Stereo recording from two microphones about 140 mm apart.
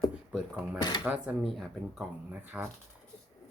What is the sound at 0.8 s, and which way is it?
Speech, 35° left (ahead or behind).